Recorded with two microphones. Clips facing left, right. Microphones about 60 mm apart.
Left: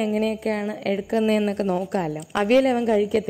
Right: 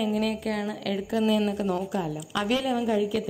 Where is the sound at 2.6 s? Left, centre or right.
Left.